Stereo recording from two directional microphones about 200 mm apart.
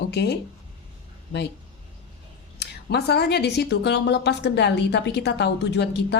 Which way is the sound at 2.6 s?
55° left (ahead or behind).